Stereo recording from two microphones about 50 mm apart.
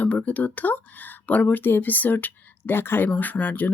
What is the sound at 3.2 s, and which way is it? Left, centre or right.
Speech, left.